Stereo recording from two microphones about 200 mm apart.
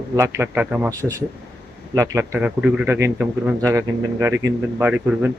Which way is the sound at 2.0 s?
15° right (ahead or behind).